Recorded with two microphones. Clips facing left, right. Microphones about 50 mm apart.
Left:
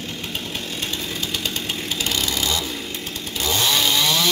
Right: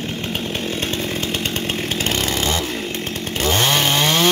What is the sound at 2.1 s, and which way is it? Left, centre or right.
Chainsaw, right.